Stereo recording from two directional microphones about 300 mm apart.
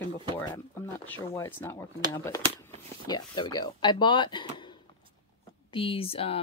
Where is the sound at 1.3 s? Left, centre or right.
Centre.